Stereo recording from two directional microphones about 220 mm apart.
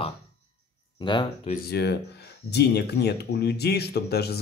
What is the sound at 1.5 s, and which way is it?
Speech, 45° left (ahead or behind).